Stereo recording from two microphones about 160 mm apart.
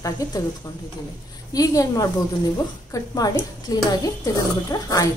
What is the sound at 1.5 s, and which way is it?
A woman's voice, 20° left (ahead or behind).